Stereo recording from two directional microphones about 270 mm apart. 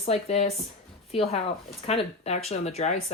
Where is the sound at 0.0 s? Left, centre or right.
Left.